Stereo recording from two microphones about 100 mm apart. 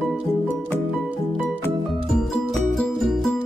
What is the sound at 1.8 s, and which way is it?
Music, centre (ahead or behind).